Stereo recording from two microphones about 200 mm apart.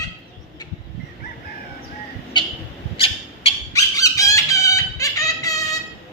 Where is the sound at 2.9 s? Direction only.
30° left (ahead or behind).